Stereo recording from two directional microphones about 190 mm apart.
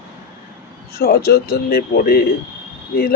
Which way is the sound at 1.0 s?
55° left (ahead or behind).